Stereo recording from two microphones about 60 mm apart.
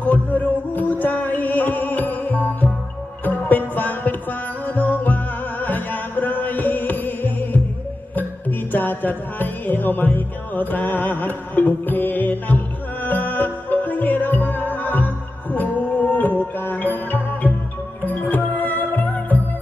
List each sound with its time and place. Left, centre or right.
0.0 s music: left